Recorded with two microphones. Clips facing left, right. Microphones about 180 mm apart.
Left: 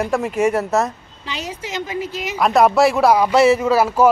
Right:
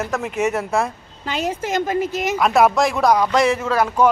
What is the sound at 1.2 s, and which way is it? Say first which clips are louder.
A woman's voice: right 6 dB; 50° right (ahead or behind).